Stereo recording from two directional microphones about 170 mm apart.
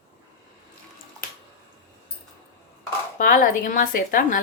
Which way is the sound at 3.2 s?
55° left (ahead or behind).